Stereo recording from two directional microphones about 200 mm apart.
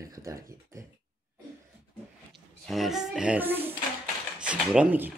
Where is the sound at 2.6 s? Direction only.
Centre (ahead or behind).